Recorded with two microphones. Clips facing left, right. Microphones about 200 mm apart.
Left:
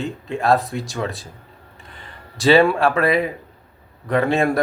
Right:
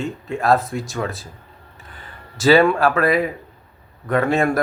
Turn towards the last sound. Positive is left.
turn(degrees=0)  # may be behind; listen again after turning